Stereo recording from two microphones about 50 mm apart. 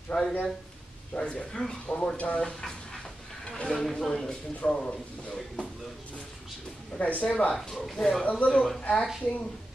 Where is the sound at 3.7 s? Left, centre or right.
Centre.